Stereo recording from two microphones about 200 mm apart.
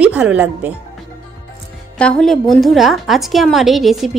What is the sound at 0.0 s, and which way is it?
Speech, 5° right (ahead or behind).